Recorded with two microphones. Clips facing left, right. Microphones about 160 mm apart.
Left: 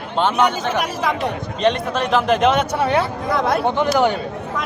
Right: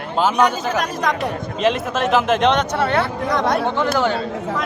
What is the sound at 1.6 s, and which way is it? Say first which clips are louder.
A man's voice: even; 5° right (ahead or behind).